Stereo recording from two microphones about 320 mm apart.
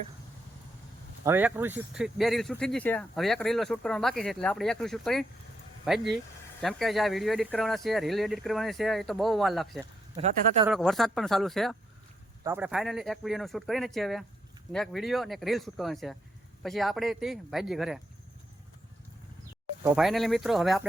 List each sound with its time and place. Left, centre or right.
1.2 s speech: centre
10.2 s speech: centre
10.7 s speech: centre
19.8 s speech: centre